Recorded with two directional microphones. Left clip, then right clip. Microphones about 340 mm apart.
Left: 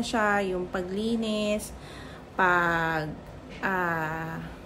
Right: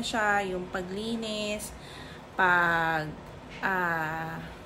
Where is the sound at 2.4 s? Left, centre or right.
Centre.